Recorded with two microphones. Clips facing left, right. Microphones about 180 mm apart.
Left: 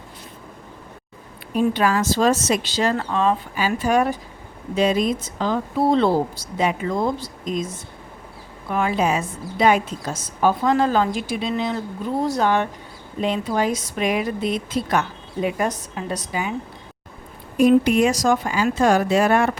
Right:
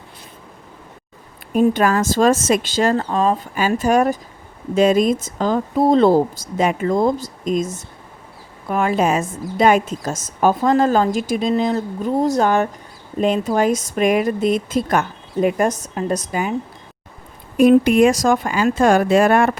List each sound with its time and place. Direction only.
1.5 s speech: 50° right (ahead or behind)
3.0 s speech: 35° right (ahead or behind)
17.6 s speech: 55° right (ahead or behind)